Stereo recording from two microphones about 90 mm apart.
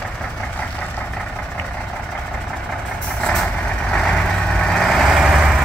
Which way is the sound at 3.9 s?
10° left (ahead or behind).